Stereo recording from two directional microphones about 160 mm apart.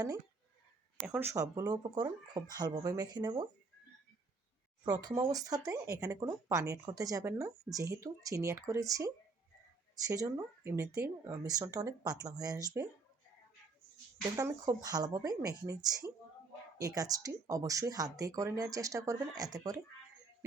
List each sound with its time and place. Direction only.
1.0 s speech: 5° right (ahead or behind)
1.3 s speech: 20° right (ahead or behind)
4.9 s speech: 20° right (ahead or behind)
14.3 s speech: 20° right (ahead or behind)